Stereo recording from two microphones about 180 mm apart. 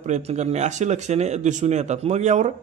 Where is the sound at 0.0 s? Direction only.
40° right (ahead or behind).